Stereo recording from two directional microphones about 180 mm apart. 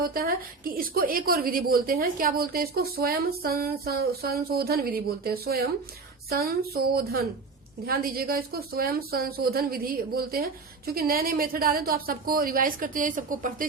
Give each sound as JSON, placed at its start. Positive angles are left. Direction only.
{"t": 0.0, "sound": "a woman's voice", "side_deg": -55}